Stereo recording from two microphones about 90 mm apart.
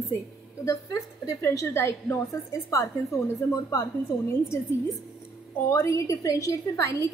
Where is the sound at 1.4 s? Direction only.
30° left (ahead or behind).